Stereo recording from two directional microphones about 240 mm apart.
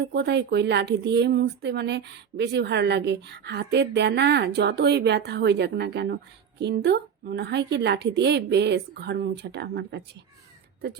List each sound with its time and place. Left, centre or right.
0.0 s a woman's voice: right